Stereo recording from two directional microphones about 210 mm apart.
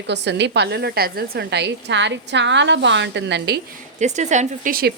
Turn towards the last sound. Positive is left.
turn(degrees=-40)  # may be behind; listen again after turning